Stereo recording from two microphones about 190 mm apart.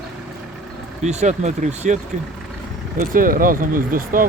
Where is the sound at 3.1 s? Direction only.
45° right (ahead or behind).